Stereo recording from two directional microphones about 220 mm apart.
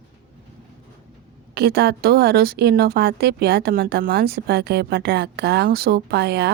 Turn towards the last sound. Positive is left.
turn(degrees=-50)  # may be behind; listen again after turning